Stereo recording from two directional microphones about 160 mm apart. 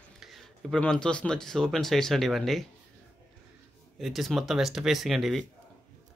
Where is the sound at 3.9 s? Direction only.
Centre (ahead or behind).